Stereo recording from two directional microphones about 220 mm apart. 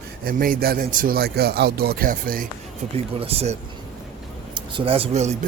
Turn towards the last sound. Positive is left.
turn(degrees=-30)  # may be behind; listen again after turning